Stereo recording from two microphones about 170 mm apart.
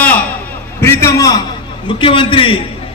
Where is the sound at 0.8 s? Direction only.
15° left (ahead or behind).